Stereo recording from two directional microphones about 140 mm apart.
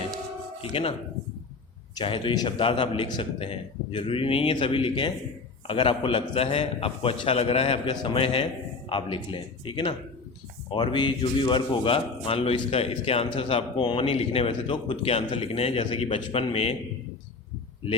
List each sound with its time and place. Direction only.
0.6 s speech: 45° left (ahead or behind)
2.0 s a man's voice: 35° left (ahead or behind)